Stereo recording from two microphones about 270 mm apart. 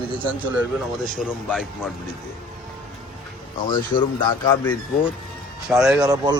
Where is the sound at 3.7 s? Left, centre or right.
Centre.